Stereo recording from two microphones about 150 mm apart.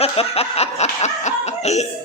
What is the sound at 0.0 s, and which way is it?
Snicker, 45° left (ahead or behind).